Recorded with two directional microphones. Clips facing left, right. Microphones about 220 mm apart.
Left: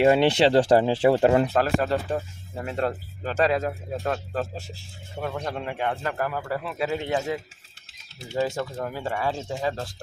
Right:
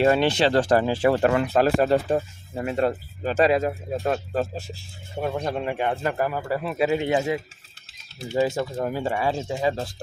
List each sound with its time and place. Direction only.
0.0 s speech: 20° left (ahead or behind)
1.5 s speech: 15° right (ahead or behind)